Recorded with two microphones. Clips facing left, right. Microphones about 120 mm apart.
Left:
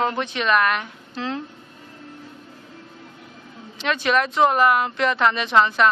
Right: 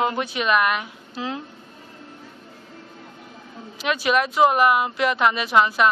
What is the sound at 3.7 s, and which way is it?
Speech, 10° right (ahead or behind).